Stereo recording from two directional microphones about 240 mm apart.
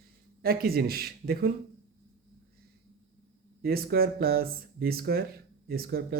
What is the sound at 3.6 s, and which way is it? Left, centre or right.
Speech, right.